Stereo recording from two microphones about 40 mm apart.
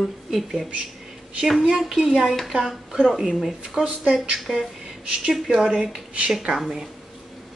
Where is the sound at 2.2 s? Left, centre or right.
Centre.